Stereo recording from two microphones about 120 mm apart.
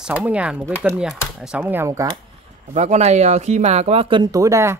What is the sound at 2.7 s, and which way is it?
Speech, 70° right (ahead or behind).